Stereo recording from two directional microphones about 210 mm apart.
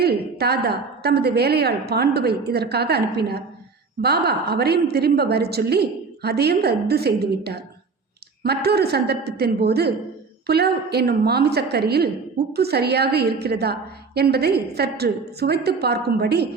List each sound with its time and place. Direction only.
0.0 s a woman's voice: 50° right (ahead or behind)